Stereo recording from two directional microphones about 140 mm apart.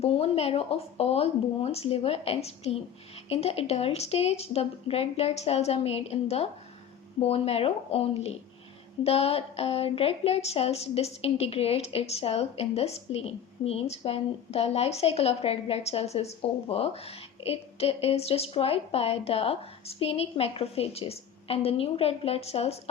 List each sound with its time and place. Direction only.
0.0 s a woman's voice: 45° left (ahead or behind)